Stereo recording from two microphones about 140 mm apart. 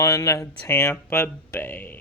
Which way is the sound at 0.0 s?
25° left (ahead or behind).